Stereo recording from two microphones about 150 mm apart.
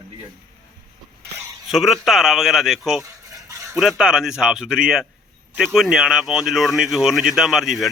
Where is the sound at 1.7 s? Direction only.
Centre (ahead or behind).